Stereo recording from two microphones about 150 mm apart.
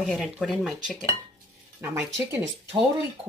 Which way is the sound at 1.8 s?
15° right (ahead or behind).